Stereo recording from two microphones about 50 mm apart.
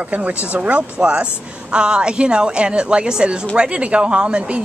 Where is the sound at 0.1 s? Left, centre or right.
Right.